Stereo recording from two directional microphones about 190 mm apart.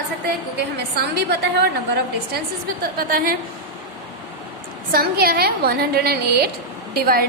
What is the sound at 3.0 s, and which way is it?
Speech, 50° right (ahead or behind).